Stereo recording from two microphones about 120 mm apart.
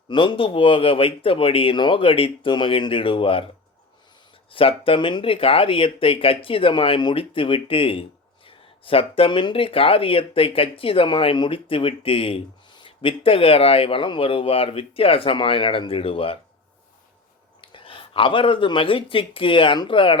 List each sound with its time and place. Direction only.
0.1 s speech: 40° left (ahead or behind)
4.5 s speech: 50° left (ahead or behind)
17.6 s speech: 45° left (ahead or behind)